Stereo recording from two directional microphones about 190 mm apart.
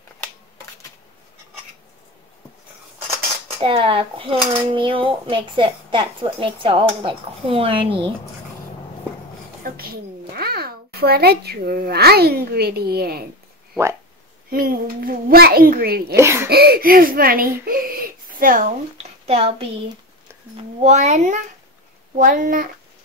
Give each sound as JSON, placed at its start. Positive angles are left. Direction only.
{"t": 3.5, "sound": "speech", "side_deg": -30}
{"t": 9.6, "sound": "a child's voice", "side_deg": -50}
{"t": 14.5, "sound": "a child's voice", "side_deg": -50}
{"t": 16.2, "sound": "speech", "side_deg": -15}
{"t": 16.4, "sound": "a child's voice", "side_deg": -55}